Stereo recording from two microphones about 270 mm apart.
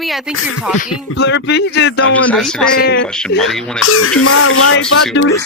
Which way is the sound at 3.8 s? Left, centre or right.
Left.